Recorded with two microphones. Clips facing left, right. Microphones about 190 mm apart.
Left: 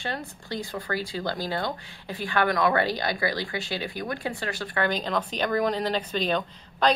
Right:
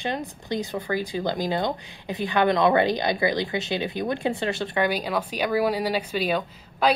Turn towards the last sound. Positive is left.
turn(degrees=-10)  # may be behind; listen again after turning